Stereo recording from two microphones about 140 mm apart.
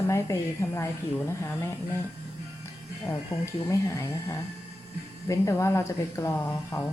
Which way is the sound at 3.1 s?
20° left (ahead or behind).